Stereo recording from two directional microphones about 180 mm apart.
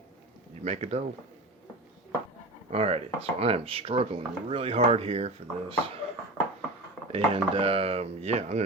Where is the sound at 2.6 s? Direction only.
35° right (ahead or behind).